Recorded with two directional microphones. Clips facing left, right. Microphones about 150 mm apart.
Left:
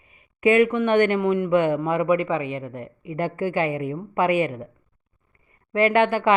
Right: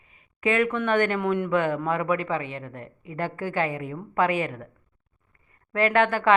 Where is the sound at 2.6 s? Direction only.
10° left (ahead or behind).